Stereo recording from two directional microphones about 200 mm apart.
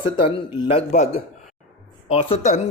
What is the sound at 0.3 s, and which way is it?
Speech, 25° left (ahead or behind).